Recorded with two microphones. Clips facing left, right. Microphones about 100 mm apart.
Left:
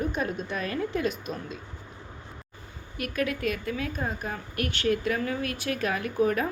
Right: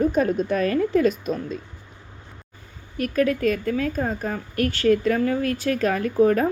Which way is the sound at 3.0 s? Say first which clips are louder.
Right 8 dB; 35° right (ahead or behind).